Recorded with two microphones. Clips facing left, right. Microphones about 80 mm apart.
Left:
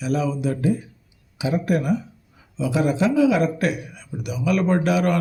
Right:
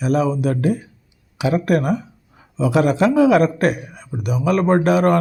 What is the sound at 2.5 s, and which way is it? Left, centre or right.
Speech, right.